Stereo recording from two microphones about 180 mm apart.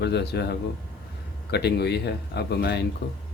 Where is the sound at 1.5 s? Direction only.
65° left (ahead or behind).